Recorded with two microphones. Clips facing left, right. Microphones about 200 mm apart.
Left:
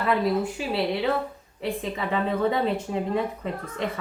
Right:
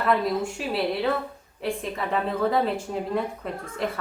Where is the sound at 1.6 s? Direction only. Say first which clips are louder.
Even; centre (ahead or behind).